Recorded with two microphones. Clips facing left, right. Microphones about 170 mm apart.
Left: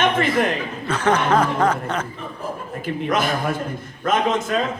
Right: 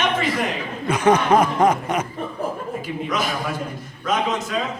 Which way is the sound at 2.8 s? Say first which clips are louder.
Left 6 dB; 50° left (ahead or behind).